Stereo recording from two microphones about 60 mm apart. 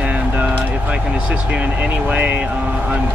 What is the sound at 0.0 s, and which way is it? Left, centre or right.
Vehicle, right.